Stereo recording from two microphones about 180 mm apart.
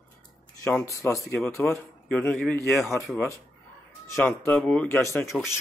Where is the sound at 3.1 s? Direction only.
15° left (ahead or behind).